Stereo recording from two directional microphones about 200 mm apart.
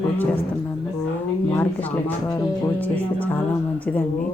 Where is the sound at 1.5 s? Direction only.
10° left (ahead or behind).